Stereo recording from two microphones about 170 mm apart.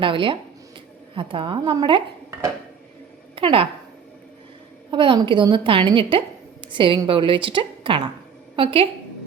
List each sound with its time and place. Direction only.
0.0 s a woman's voice: 30° right (ahead or behind)
3.3 s a woman's voice: 30° right (ahead or behind)
4.9 s a woman's voice: 30° right (ahead or behind)